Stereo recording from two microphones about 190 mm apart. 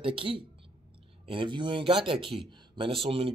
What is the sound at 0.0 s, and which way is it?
Speech, 30° right (ahead or behind).